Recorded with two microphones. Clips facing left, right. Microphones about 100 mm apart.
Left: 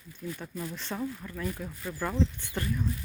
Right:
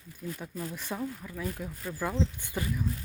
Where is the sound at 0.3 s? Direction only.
5° right (ahead or behind).